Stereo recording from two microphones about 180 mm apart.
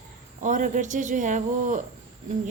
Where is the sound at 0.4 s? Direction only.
45° right (ahead or behind).